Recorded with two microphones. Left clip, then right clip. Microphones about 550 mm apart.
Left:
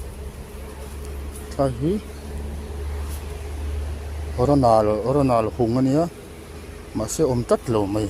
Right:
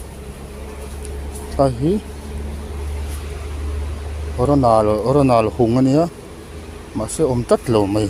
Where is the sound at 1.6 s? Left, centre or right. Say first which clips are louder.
Right 6 dB; left.